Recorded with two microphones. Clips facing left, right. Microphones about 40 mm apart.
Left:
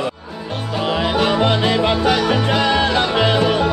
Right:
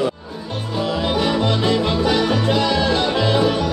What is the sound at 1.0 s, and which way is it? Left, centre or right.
Music, left.